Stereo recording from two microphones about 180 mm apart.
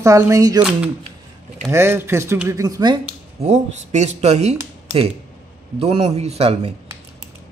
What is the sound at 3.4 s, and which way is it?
Speech, 40° right (ahead or behind).